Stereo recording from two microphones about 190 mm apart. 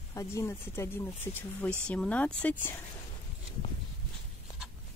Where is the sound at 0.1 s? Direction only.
15° left (ahead or behind).